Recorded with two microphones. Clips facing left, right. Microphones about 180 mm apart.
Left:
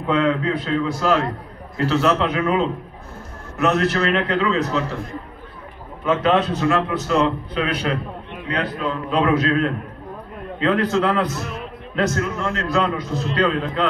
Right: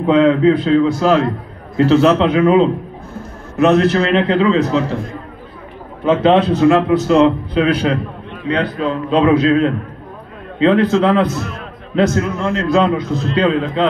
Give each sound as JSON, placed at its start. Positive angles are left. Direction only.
{"t": 0.0, "sound": "a man's voice", "side_deg": -30}
{"t": 6.0, "sound": "a man's voice", "side_deg": -30}